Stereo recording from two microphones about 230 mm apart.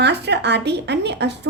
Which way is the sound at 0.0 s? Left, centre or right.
Right.